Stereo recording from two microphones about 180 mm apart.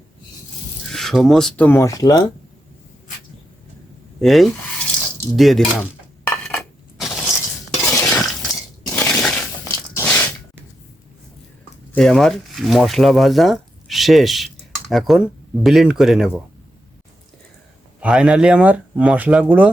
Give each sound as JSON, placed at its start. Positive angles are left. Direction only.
{"t": 0.9, "sound": "speech", "side_deg": 0}
{"t": 4.2, "sound": "speech", "side_deg": 0}
{"t": 6.3, "sound": "coin", "side_deg": 5}
{"t": 7.8, "sound": "a sound", "side_deg": 15}
{"t": 9.7, "sound": "snort", "side_deg": 15}
{"t": 11.9, "sound": "speech", "side_deg": 5}
{"t": 18.0, "sound": "speech", "side_deg": -5}